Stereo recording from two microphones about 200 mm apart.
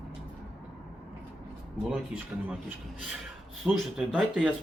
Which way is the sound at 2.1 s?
5° right (ahead or behind).